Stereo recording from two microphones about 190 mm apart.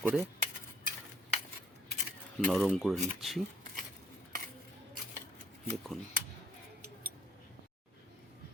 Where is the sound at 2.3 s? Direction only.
Centre (ahead or behind).